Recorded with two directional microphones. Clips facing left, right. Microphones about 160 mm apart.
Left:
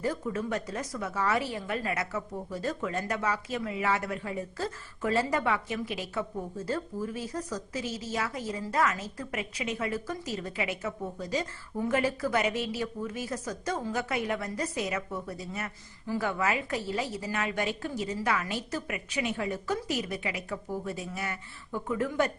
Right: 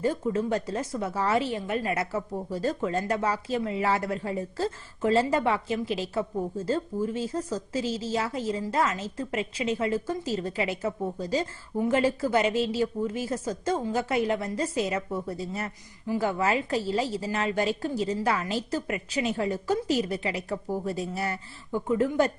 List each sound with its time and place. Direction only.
0.0 s a woman's voice: 30° right (ahead or behind)